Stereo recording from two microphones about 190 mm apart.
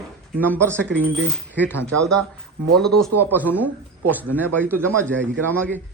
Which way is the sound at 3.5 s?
10° right (ahead or behind).